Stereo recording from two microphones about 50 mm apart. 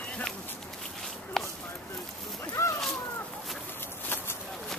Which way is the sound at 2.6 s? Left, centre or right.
Left.